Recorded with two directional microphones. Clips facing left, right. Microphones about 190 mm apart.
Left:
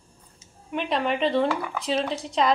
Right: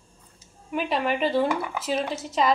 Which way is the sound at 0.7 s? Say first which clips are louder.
Even; 5° right (ahead or behind).